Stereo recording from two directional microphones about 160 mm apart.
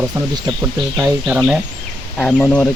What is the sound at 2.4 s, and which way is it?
Speech, 10° left (ahead or behind).